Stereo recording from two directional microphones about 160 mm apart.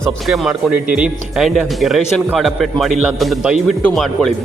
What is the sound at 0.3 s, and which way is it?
Speech, 5° right (ahead or behind).